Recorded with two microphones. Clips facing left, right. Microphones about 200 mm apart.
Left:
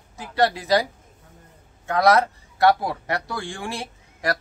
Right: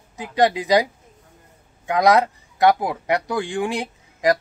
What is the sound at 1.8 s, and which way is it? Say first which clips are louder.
Speech: right 2 dB; 15° right (ahead or behind).